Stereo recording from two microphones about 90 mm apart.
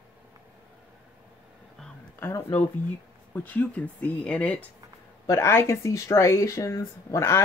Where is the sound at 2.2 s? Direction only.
25° left (ahead or behind).